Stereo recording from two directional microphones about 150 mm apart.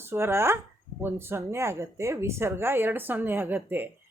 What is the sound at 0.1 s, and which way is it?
A woman's voice, 15° right (ahead or behind).